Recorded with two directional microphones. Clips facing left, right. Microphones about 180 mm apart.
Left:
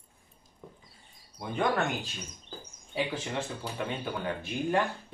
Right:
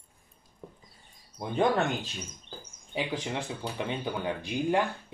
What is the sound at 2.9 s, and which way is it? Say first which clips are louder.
Speech: even; 15° right (ahead or behind).